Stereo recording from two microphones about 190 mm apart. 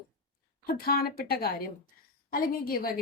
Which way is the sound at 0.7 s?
50° left (ahead or behind).